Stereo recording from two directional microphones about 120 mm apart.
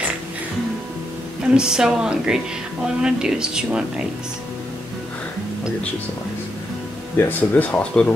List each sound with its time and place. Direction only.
1.5 s speech: 5° right (ahead or behind)
7.2 s speech: 15° left (ahead or behind)